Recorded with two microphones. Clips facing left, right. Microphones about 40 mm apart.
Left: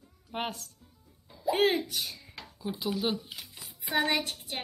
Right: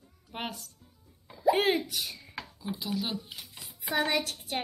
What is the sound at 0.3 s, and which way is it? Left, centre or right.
Speech, centre.